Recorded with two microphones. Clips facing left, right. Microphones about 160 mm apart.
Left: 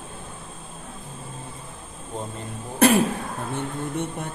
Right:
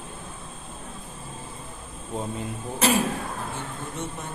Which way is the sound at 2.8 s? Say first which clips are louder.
Left 6 dB; 55° left (ahead or behind).